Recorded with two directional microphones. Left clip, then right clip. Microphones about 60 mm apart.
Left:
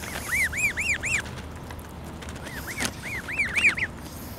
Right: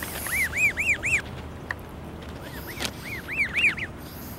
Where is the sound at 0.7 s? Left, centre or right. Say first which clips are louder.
Right 2 dB; centre.